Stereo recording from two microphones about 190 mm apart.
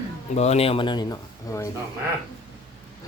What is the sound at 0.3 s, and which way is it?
Speech, 35° left (ahead or behind).